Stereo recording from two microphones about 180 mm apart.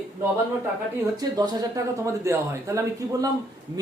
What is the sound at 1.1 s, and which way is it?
A woman's voice, 20° right (ahead or behind).